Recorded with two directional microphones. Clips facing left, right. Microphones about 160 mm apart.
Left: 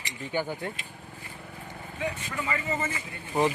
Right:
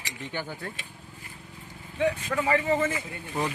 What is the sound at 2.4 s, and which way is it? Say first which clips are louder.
Speech: right 7 dB; 60° right (ahead or behind).